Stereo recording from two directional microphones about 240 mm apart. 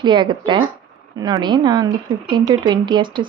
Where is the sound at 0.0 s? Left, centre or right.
Centre.